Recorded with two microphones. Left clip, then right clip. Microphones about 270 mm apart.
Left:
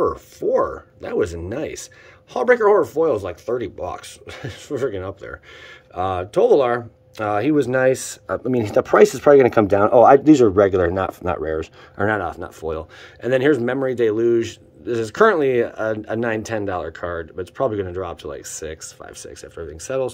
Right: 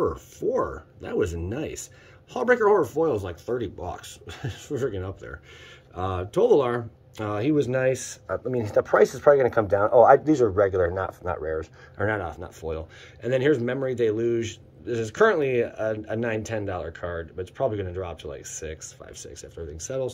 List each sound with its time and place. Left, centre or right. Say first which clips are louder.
0.0 s speech: left 5 dB; centre